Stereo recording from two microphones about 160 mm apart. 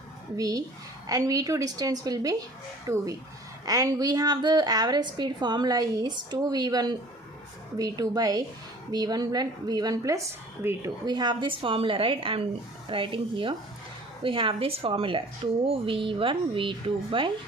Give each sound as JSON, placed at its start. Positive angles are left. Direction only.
{"t": 0.3, "sound": "a woman's voice", "side_deg": -20}
{"t": 11.0, "sound": "a woman's voice", "side_deg": -25}